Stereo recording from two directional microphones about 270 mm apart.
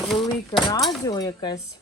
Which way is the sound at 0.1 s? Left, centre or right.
Centre.